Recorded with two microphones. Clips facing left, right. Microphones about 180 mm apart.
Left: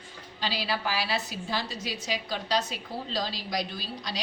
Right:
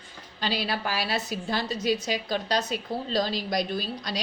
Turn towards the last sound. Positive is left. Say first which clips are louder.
# right 6 dB
turn(degrees=-50)  # may be behind; listen again after turning